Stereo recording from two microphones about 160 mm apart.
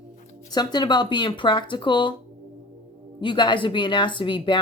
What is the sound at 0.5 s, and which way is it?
Speech, 25° left (ahead or behind).